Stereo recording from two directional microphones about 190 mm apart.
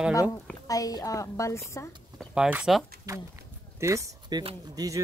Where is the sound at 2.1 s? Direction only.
5° right (ahead or behind).